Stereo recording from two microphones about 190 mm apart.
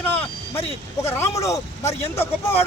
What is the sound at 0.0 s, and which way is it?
Vehicle, 10° left (ahead or behind).